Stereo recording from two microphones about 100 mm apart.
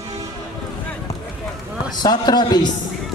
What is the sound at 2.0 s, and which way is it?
Speech, 45° left (ahead or behind).